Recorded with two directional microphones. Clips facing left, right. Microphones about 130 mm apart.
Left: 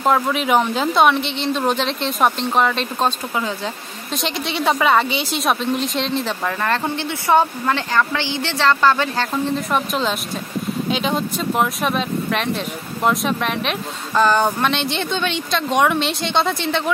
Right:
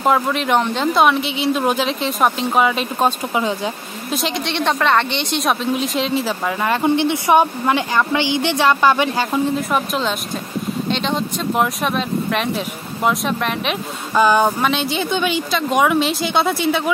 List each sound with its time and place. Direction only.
0.0 s speech: centre (ahead or behind); by 3.7 s 15° right (ahead or behind)
4.1 s speech: centre (ahead or behind)